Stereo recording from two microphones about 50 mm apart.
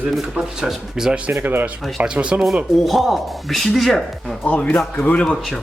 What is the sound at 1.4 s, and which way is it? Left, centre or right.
Speech, right.